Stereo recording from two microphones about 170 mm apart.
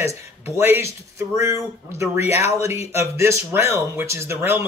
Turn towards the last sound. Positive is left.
turn(degrees=-15)  # may be behind; listen again after turning